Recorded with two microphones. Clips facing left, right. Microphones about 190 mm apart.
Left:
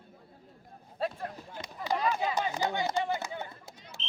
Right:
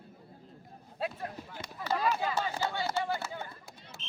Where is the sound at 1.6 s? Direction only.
15° left (ahead or behind).